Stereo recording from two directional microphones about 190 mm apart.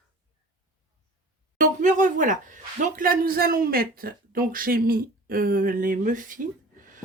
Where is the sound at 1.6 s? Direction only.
40° right (ahead or behind).